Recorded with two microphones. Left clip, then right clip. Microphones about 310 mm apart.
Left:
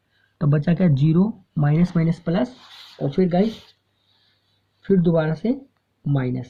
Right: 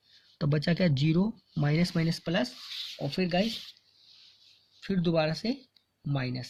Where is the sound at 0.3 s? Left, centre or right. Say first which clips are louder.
Left 6 dB; right.